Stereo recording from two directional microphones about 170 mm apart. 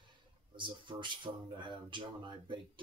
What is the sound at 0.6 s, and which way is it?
Speech, 30° right (ahead or behind).